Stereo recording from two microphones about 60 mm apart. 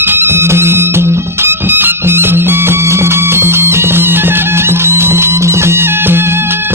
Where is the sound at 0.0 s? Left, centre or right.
Right.